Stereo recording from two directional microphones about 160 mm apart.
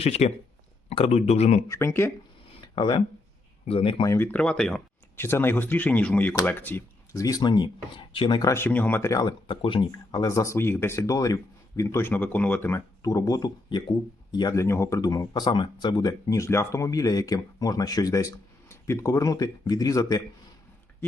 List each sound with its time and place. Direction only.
0.0 s speech: 40° left (ahead or behind)
1.6 s speech: 15° left (ahead or behind)
2.5 s a sound: 30° left (ahead or behind)
3.7 s speech: 35° left (ahead or behind)
4.0 s speech: 15° left (ahead or behind)